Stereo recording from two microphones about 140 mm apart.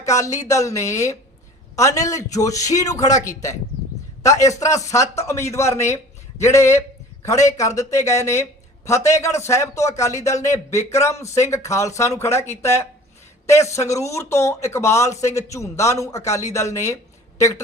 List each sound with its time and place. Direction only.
0.0 s speech: 25° left (ahead or behind)